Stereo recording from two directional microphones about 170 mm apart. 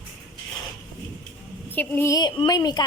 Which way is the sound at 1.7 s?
10° left (ahead or behind).